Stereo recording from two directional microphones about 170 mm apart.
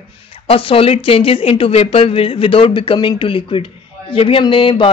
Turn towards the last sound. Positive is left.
turn(degrees=30)  # may be behind; listen again after turning